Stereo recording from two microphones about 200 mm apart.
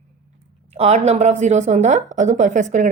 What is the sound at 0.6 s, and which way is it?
Speech, 35° right (ahead or behind).